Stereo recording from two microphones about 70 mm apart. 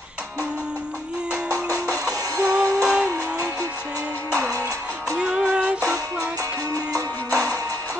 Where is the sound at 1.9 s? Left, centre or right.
Right.